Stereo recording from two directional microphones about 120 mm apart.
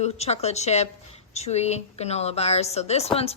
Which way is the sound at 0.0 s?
60° left (ahead or behind).